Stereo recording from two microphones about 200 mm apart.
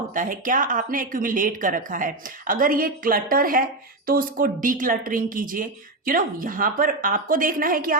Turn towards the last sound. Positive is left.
turn(degrees=-45)  # may be behind; listen again after turning